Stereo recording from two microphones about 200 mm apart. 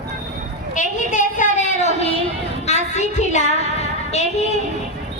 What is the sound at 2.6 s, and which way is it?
Child singing, 35° left (ahead or behind).